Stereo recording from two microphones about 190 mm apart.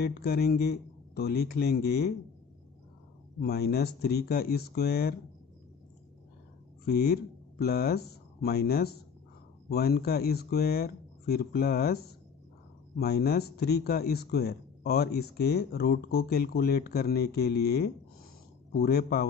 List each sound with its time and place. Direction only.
0.0 s speech: 55° left (ahead or behind)
3.3 s speech: 55° left (ahead or behind)
6.9 s speech: 55° left (ahead or behind)